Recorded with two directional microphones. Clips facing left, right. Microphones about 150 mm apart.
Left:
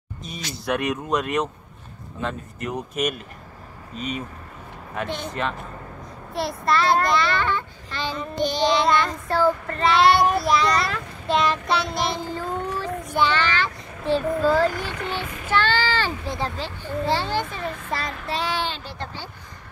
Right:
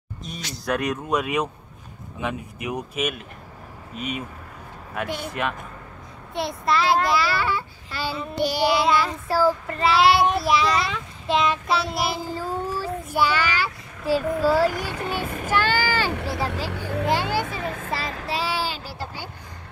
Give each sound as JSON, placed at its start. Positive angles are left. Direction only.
{"t": 0.2, "sound": "a child's voice", "side_deg": 0}
{"t": 15.4, "sound": "child singing", "side_deg": -10}
{"t": 16.1, "sound": "vehicle", "side_deg": -70}
{"t": 16.7, "sound": "a child's voice", "side_deg": -80}
{"t": 17.0, "sound": "speech", "side_deg": -10}
{"t": 18.3, "sound": "a sound", "side_deg": -5}